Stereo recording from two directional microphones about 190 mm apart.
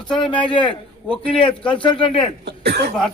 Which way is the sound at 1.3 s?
30° left (ahead or behind).